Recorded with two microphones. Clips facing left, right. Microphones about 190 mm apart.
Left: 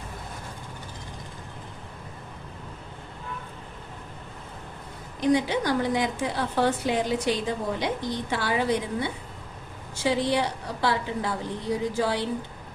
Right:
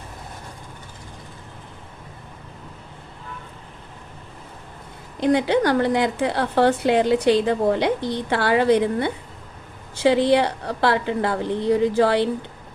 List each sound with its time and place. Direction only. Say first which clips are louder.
5.2 s a woman's voice: right 5 dB; 60° right (ahead or behind)